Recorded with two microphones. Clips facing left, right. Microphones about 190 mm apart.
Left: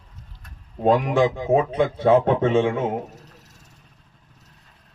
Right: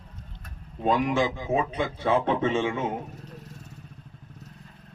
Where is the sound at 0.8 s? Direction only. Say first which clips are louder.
Left 5 dB; 55° left (ahead or behind).